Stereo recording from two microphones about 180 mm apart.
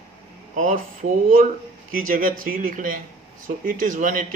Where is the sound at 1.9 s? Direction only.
50° right (ahead or behind).